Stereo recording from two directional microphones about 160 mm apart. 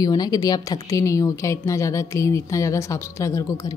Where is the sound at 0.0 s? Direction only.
25° left (ahead or behind).